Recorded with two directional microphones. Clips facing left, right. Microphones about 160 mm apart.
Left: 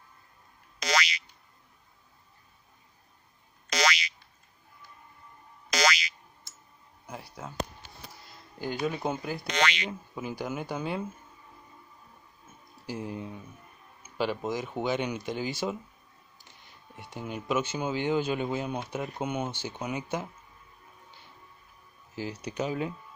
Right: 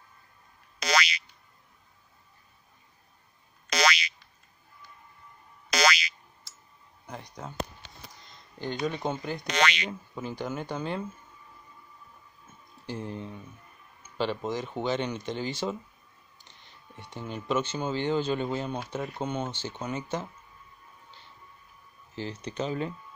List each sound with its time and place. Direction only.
0.7 s boing: 65° right (ahead or behind)
3.7 s boing: 65° right (ahead or behind)
5.7 s boing: 65° right (ahead or behind)
7.1 s speech: 5° left (ahead or behind)
12.8 s speech: 10° left (ahead or behind)
22.1 s speech: 10° left (ahead or behind)